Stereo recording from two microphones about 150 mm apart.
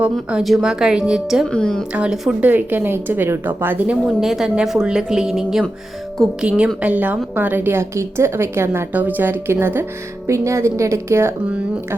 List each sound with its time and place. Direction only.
0.0 s speech: 5° right (ahead or behind)
1.9 s a woman's voice: 5° right (ahead or behind)